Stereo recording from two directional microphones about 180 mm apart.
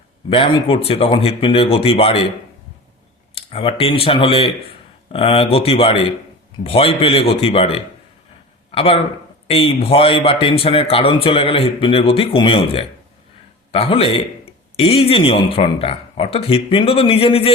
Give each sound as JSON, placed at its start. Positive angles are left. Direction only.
{"t": 0.3, "sound": "a man's voice", "side_deg": 30}
{"t": 3.3, "sound": "a man's voice", "side_deg": 30}